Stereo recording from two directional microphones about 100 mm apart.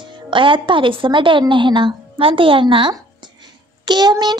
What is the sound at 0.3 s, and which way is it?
Speech, 55° right (ahead or behind).